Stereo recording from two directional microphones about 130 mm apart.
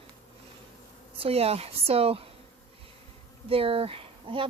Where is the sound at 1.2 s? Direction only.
50° right (ahead or behind).